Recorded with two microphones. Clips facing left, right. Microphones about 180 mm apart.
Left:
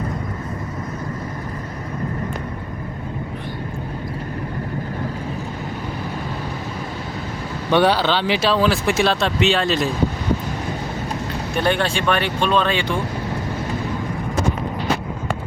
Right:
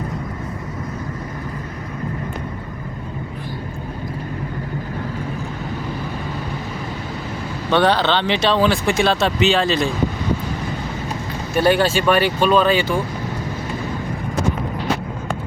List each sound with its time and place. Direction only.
7.7 s speech: 10° left (ahead or behind)
11.5 s speech: 5° right (ahead or behind)